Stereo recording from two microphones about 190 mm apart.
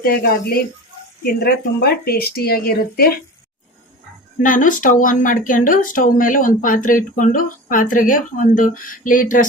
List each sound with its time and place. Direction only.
0.0 s speech: 50° left (ahead or behind)
4.4 s speech: 45° left (ahead or behind)